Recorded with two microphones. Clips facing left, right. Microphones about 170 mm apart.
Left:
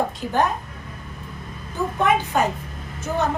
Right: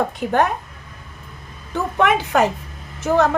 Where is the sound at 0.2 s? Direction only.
60° right (ahead or behind).